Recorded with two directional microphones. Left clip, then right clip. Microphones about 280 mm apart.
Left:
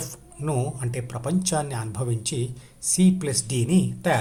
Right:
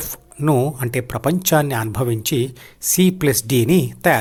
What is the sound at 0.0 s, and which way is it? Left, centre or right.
Speech, right.